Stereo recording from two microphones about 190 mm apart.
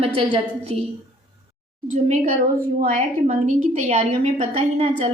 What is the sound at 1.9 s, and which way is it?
Speech, 40° right (ahead or behind).